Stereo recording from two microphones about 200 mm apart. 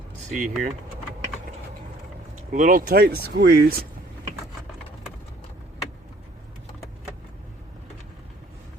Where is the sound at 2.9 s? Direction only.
50° right (ahead or behind).